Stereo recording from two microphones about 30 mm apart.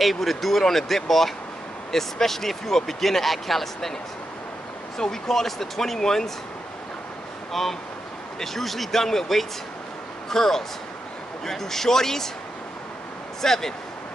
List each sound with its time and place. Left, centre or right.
0.0 s speech: centre
4.9 s speech: centre
7.6 s speech: centre
13.4 s speech: centre